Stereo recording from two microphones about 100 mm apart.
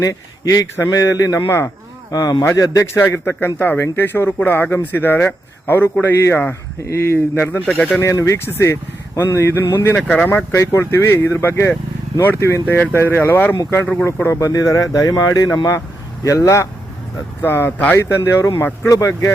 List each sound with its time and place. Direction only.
0.0 s speech: 35° left (ahead or behind)
2.0 s speech: 35° left (ahead or behind)
3.0 s speech: 25° left (ahead or behind)
8.0 s speech: 30° left (ahead or behind)
10.0 s speech: 10° left (ahead or behind)
10.2 s speech: 30° left (ahead or behind)
17.4 s speech: 20° left (ahead or behind)
17.9 s speech: 25° left (ahead or behind)